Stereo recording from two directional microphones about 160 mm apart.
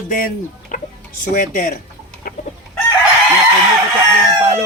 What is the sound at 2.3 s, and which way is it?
Chicken, 65° left (ahead or behind).